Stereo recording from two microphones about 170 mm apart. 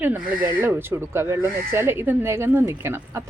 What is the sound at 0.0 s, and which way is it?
Speech, 10° right (ahead or behind).